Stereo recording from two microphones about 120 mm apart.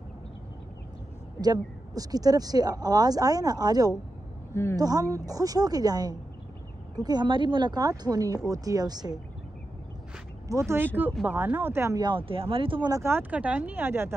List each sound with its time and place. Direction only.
1.4 s speech: 30° right (ahead or behind)
10.5 s speech: 20° right (ahead or behind)
12.0 s speech: 45° right (ahead or behind)
12.9 s speech: 20° right (ahead or behind)